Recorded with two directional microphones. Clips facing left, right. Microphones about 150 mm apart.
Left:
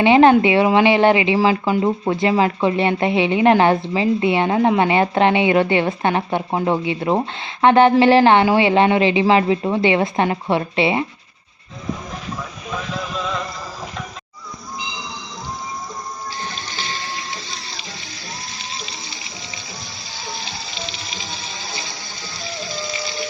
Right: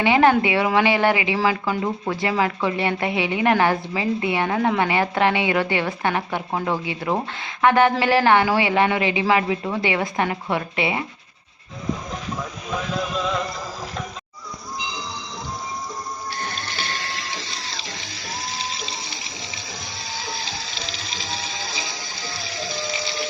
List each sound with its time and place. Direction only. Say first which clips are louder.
0.0 s speech: left 5 dB; 25° left (ahead or behind)
16.4 s pump: even; 55° right (ahead or behind)